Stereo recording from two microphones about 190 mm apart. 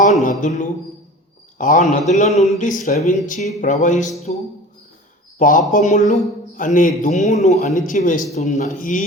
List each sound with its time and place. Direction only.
0.0 s music: 40° left (ahead or behind)
1.5 s a man's voice: 40° left (ahead or behind)
5.4 s a man's voice: 45° left (ahead or behind)